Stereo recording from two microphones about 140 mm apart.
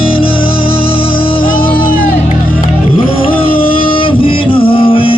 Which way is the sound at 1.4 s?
90° left.